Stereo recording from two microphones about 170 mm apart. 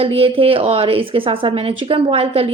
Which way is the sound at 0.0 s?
35° right (ahead or behind).